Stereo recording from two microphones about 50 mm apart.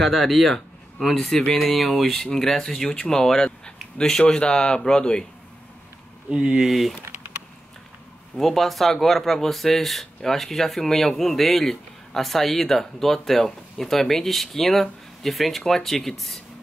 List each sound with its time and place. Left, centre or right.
0.0 s a man's voice: centre
6.3 s speech: centre
6.6 s speech: centre
8.4 s speech: centre